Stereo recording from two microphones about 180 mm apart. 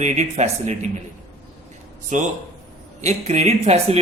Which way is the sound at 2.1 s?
45° right (ahead or behind).